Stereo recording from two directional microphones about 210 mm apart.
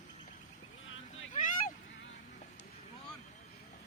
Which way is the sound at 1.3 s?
40° left (ahead or behind).